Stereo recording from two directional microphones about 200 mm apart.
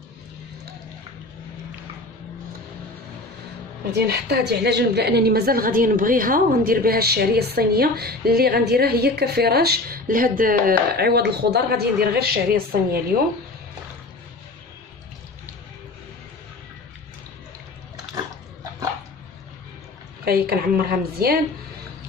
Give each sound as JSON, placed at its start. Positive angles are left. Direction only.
{"t": 3.9, "sound": "a woman's voice", "side_deg": -55}
{"t": 20.2, "sound": "a woman's voice", "side_deg": -50}